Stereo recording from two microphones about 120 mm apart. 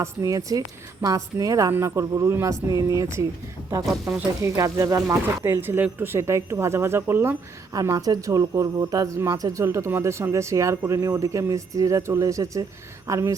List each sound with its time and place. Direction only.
0.0 s speech: 30° right (ahead or behind)
4.4 s speech: 25° right (ahead or behind)
7.8 s speech: 30° right (ahead or behind)